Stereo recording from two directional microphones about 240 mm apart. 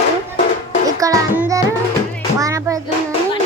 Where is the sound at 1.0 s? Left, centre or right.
Centre.